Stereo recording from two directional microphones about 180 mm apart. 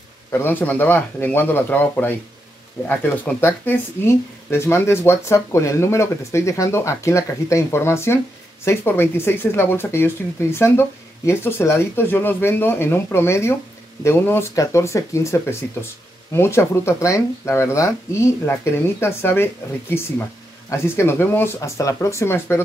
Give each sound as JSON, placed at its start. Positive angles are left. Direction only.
{"t": 0.3, "sound": "speech", "side_deg": 10}